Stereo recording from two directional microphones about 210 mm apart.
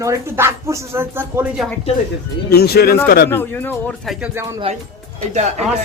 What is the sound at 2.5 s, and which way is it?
Speech, 50° left (ahead or behind).